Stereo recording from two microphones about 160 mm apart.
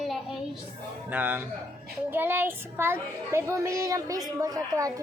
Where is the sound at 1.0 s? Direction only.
10° right (ahead or behind).